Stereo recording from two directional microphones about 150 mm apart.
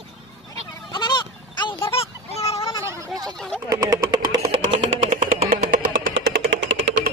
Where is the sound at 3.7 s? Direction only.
25° right (ahead or behind).